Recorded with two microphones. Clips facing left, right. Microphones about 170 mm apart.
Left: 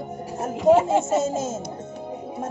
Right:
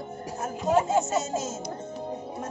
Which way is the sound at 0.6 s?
70° left (ahead or behind).